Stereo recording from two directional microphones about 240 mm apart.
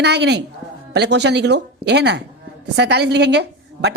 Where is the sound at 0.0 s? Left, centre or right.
Right.